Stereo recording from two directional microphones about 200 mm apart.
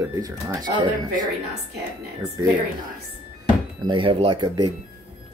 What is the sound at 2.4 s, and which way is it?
Speech, 20° right (ahead or behind).